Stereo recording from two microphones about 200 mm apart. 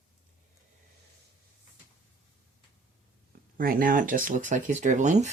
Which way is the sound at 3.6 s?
45° right (ahead or behind).